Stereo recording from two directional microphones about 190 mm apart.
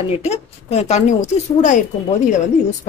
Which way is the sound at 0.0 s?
35° left (ahead or behind).